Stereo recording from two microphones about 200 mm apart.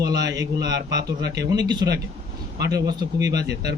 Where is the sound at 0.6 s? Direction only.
55° right (ahead or behind).